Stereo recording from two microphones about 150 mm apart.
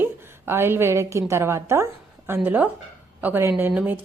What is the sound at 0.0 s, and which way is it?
A woman's voice, 15° right (ahead or behind).